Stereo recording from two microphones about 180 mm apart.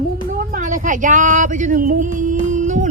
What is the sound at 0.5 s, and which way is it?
Music, 45° right (ahead or behind).